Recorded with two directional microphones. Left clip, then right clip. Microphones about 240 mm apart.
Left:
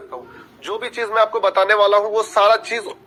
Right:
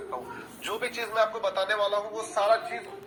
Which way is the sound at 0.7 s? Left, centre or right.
Left.